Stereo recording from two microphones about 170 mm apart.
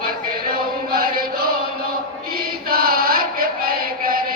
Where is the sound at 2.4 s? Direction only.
60° right (ahead or behind).